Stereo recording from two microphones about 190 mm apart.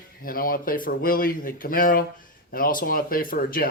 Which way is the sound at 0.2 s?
50° left (ahead or behind).